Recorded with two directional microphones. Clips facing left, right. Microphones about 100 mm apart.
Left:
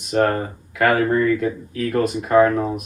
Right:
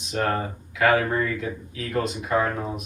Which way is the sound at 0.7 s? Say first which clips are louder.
Left 3 dB; 50° left (ahead or behind).